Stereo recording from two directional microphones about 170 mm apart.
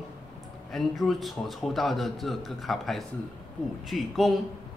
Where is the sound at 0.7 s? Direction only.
Centre (ahead or behind).